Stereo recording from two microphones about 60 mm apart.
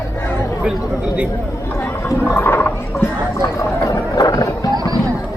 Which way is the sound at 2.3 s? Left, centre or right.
Left.